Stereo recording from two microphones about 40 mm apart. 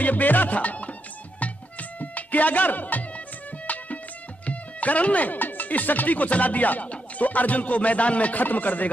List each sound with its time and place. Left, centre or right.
0.0 s music: left
4.5 s speech: left